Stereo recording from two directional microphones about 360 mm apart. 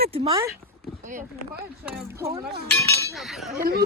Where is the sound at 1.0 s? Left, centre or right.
Right.